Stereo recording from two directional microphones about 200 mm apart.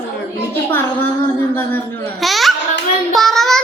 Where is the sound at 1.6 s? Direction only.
10° left (ahead or behind).